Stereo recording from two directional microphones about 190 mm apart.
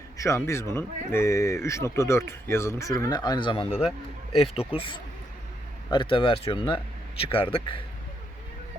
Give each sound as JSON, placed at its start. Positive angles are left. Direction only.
{"t": 0.2, "sound": "speech", "side_deg": 15}
{"t": 3.8, "sound": "a man's voice", "side_deg": -5}
{"t": 4.7, "sound": "speech", "side_deg": 25}